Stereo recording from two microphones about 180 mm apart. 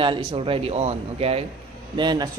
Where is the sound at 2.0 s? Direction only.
25° right (ahead or behind).